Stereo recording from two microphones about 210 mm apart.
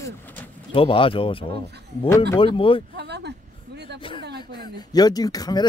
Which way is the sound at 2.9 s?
50° right (ahead or behind).